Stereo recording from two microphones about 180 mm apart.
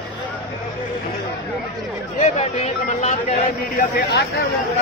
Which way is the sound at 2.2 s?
40° left (ahead or behind).